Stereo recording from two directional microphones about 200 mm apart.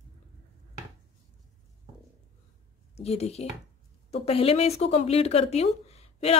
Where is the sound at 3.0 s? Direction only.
30° left (ahead or behind).